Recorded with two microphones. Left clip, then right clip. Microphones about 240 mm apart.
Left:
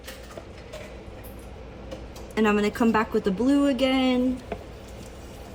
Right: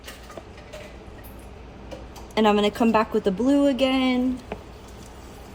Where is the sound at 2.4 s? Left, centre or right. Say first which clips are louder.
Right 3 dB; centre.